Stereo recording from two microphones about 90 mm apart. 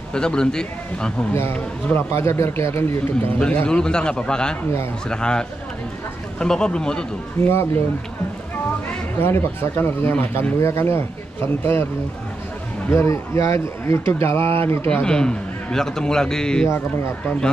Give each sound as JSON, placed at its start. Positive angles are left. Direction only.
{"t": 0.1, "sound": "a man's voice", "side_deg": 10}
{"t": 1.3, "sound": "speech", "side_deg": 25}
{"t": 3.3, "sound": "a man's voice", "side_deg": 10}
{"t": 7.4, "sound": "speech", "side_deg": 25}
{"t": 9.2, "sound": "speech", "side_deg": 25}
{"t": 12.9, "sound": "speech", "side_deg": 30}
{"t": 14.9, "sound": "a man's voice", "side_deg": 10}